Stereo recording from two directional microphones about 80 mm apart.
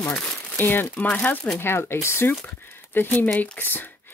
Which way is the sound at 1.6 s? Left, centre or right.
Left.